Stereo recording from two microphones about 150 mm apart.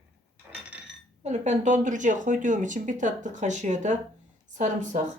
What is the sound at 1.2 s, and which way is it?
Speech, 50° right (ahead or behind).